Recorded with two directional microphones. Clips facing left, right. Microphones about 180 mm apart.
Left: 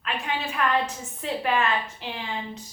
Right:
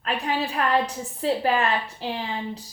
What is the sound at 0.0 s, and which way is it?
A woman's voice, 35° right (ahead or behind).